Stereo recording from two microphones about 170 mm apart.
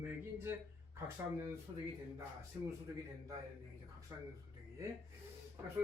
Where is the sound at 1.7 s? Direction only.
30° right (ahead or behind).